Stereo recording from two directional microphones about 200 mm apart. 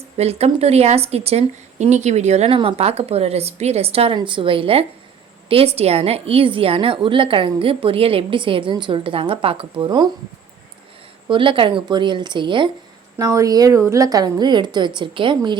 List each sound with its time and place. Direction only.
0.2 s a woman's voice: 30° right (ahead or behind)
11.3 s a woman's voice: 25° right (ahead or behind)